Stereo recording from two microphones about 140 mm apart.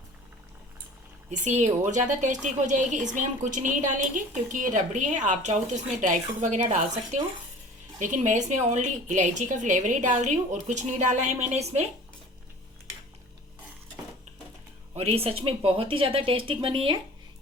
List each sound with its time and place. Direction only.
1.3 s a woman's voice: 55° right (ahead or behind)
14.9 s speech: 45° right (ahead or behind)